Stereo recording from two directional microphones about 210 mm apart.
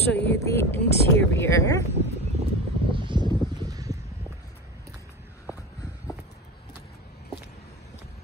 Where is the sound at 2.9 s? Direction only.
25° right (ahead or behind).